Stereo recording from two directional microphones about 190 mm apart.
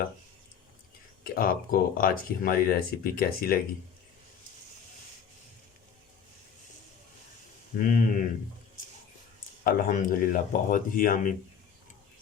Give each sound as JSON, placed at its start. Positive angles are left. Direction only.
{"t": 1.2, "sound": "speech", "side_deg": 50}
{"t": 7.8, "sound": "speech", "side_deg": 45}
{"t": 9.6, "sound": "speech", "side_deg": 50}